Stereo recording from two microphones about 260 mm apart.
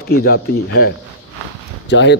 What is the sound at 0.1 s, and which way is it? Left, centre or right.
Speech, left.